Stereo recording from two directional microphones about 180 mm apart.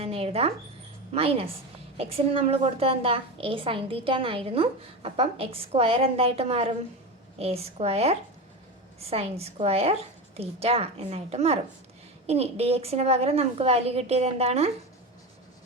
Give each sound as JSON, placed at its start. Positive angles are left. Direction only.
{"t": 0.0, "sound": "a woman's voice", "side_deg": -35}